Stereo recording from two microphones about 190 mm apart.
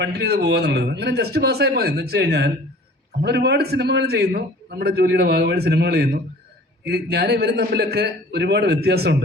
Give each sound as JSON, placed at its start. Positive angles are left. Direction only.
{"t": 0.0, "sound": "a man's voice", "side_deg": -55}